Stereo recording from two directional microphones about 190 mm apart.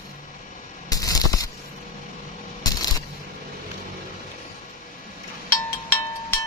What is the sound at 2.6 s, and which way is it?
Coin, 20° left (ahead or behind).